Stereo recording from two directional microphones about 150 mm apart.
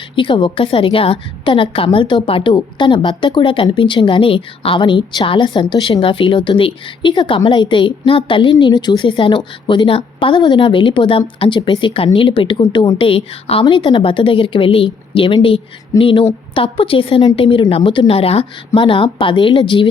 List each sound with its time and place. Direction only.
0.2 s a woman's voice: 35° left (ahead or behind)